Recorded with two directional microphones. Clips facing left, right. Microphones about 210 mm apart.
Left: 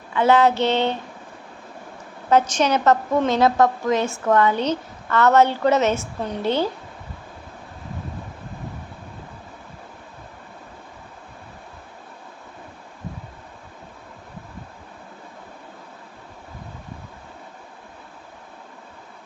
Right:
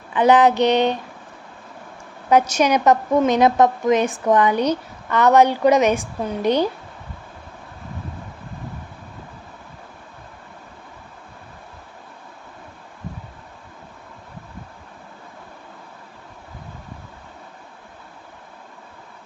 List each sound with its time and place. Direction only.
0.1 s a woman's voice: 15° right (ahead or behind)
2.5 s a woman's voice: 10° right (ahead or behind)